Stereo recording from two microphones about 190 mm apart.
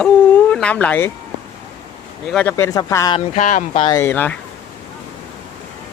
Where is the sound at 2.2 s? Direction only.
10° left (ahead or behind).